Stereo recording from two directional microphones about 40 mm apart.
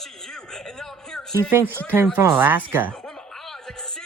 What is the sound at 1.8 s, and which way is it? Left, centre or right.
Speech, right.